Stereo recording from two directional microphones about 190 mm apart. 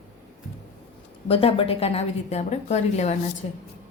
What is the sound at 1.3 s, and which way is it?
A woman's voice, 30° left (ahead or behind).